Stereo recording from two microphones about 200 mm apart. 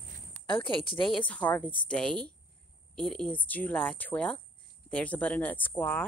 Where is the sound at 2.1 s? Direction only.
25° right (ahead or behind).